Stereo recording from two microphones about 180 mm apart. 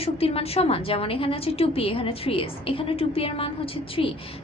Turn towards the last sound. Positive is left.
turn(degrees=30)  # may be behind; listen again after turning